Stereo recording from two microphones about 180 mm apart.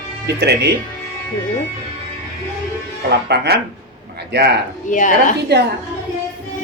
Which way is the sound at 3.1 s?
70° right (ahead or behind).